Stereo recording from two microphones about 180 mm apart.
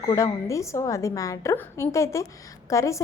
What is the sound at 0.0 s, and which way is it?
A woman's voice, 15° left (ahead or behind).